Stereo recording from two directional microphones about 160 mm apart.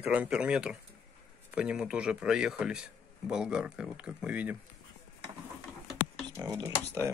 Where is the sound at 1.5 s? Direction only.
5° right (ahead or behind).